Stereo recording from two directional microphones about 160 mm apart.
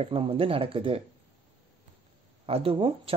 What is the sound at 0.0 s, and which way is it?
Speech, 35° right (ahead or behind).